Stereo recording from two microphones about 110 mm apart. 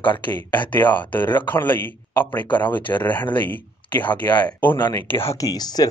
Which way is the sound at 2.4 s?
45° left (ahead or behind).